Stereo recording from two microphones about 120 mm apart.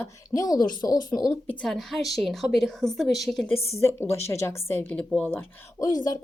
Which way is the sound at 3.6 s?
20° left (ahead or behind).